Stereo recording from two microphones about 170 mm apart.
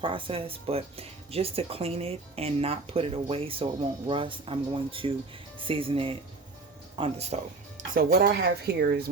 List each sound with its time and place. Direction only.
0.0 s speech: 30° right (ahead or behind)
7.9 s speech: 65° right (ahead or behind)